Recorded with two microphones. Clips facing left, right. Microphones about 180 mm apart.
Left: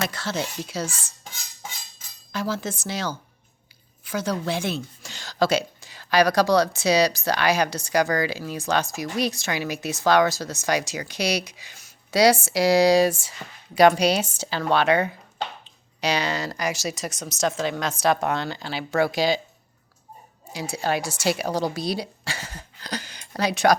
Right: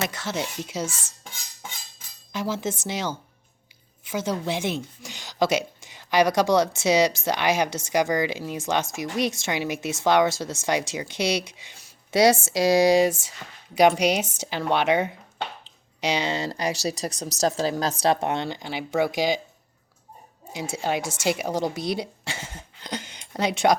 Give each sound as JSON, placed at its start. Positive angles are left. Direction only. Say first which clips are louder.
{"t": 0.0, "sound": "a woman's voice", "louder": "left 1 dB", "side_deg": -20}
{"t": 2.3, "sound": "a woman's voice", "louder": "even", "side_deg": -20}
{"t": 20.5, "sound": "a woman's voice", "louder": "left 1 dB", "side_deg": -20}